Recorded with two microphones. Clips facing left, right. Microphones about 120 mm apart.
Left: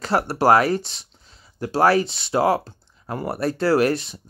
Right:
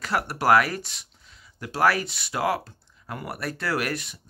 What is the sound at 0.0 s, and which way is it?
Speech, 30° left (ahead or behind).